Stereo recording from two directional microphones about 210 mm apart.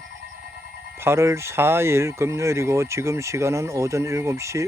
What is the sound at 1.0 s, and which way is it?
Speech, 10° right (ahead or behind).